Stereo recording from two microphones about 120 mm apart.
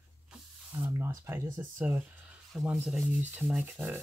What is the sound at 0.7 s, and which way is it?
Speech, 20° right (ahead or behind).